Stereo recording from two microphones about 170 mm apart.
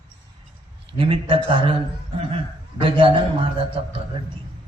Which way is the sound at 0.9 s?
30° right (ahead or behind).